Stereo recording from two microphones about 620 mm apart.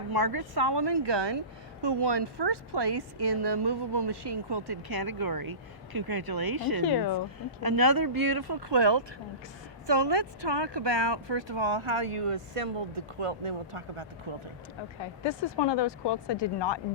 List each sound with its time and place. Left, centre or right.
0.1 s a woman's voice: right
6.8 s speech: left
7.6 s a woman's voice: right
15.0 s speech: left